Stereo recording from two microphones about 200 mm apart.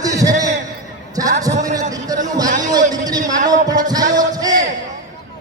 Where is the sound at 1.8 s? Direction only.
20° right (ahead or behind).